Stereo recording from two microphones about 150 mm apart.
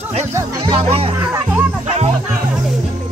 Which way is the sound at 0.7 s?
40° right (ahead or behind).